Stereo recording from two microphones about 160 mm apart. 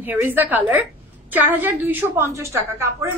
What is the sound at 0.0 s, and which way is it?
A woman's voice, 10° right (ahead or behind).